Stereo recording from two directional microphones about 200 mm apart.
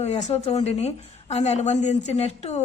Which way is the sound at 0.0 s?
35° left (ahead or behind).